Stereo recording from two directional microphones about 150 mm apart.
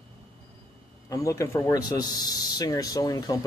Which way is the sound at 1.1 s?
20° left (ahead or behind).